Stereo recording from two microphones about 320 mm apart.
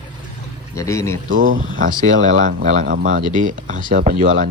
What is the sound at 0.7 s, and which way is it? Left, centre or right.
Speech, centre.